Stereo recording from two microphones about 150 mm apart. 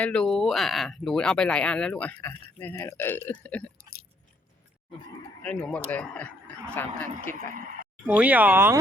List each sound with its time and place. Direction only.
0.0 s speech: 5° left (ahead or behind)
3.8 s keys jangling: 90° left
5.4 s speech: 5° left (ahead or behind)
7.5 s speech: 70° right (ahead or behind)
8.0 s speech: 10° right (ahead or behind)